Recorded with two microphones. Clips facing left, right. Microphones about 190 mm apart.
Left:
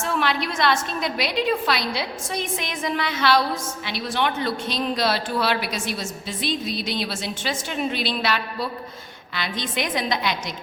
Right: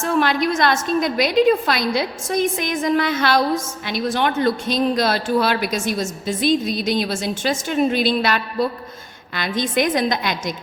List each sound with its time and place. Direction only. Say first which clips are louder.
0.0 s speech: right 6 dB; 45° right (ahead or behind)